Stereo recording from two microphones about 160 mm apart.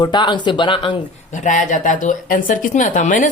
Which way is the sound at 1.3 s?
50° left (ahead or behind).